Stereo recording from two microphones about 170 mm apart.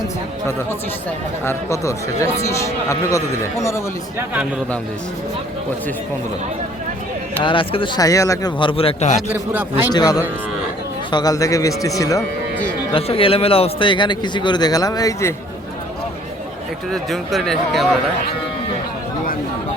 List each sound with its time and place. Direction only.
1.5 s speech: 15° left (ahead or behind)
7.4 s a man's voice: 30° left (ahead or behind)
9.3 s a man's voice: 10° right (ahead or behind)
9.9 s a man's voice: 20° left (ahead or behind)
12.9 s a man's voice: 35° left (ahead or behind)
16.9 s speech: centre (ahead or behind)